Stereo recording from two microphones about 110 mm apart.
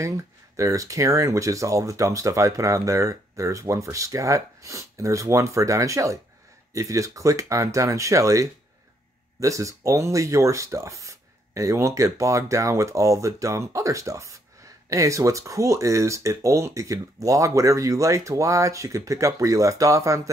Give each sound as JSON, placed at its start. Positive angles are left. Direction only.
{"t": 0.6, "sound": "speech", "side_deg": -30}